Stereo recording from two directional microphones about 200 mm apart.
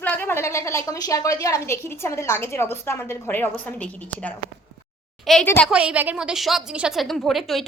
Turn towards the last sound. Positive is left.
turn(degrees=0)  # may be behind; listen again after turning